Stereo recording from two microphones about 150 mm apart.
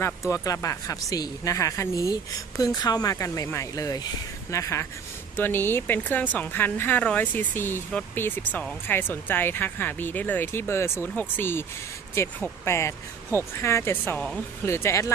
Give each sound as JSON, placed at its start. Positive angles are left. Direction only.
{"t": 0.0, "sound": "speech", "side_deg": 20}